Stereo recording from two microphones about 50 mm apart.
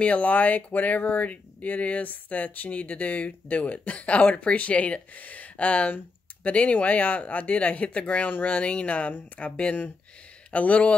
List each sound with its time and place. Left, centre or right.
0.0 s speech: left
9.6 s speech: left